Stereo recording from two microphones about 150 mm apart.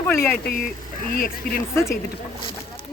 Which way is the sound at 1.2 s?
70° left (ahead or behind).